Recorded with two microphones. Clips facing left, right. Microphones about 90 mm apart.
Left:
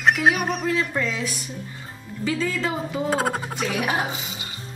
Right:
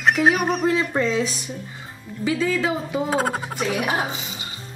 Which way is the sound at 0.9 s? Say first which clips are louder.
Right 5 dB; 25° right (ahead or behind).